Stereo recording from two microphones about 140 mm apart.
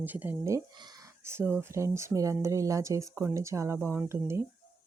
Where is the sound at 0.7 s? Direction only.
30° right (ahead or behind).